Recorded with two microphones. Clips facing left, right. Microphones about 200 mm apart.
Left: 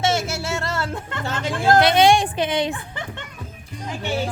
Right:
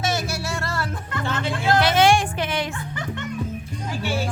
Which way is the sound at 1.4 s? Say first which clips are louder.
Left 4 dB; 45° left (ahead or behind).